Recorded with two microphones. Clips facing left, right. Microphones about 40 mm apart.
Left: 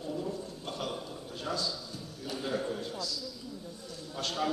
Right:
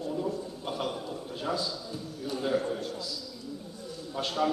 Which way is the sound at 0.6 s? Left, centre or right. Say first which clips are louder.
Right 5 dB; centre.